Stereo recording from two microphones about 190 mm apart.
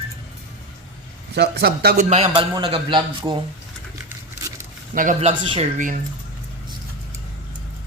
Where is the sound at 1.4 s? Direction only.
60° right (ahead or behind).